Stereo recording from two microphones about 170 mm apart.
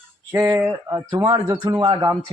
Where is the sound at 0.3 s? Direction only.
15° right (ahead or behind).